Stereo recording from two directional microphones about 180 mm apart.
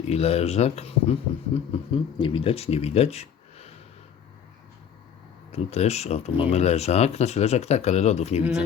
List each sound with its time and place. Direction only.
0.1 s speech: 35° left (ahead or behind)
5.5 s speech: 35° left (ahead or behind)